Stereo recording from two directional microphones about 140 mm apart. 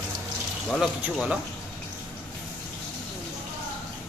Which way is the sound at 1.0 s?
5° right (ahead or behind).